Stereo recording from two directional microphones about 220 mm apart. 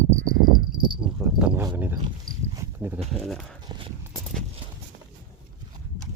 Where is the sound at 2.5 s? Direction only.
10° right (ahead or behind).